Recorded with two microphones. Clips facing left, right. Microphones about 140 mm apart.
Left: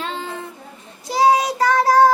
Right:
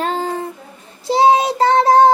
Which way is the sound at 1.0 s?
25° right (ahead or behind).